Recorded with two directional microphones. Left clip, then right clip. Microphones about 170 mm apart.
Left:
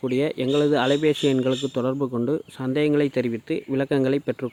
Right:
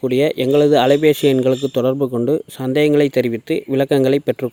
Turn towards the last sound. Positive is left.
turn(degrees=-30)  # may be behind; listen again after turning